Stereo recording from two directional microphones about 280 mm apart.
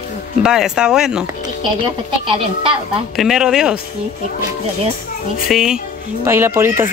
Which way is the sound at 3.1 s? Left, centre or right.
Centre.